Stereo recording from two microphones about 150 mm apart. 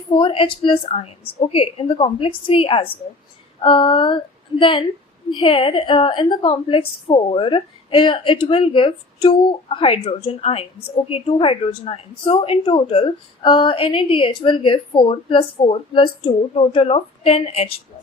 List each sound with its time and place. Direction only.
0.1 s a woman's voice: 35° left (ahead or behind)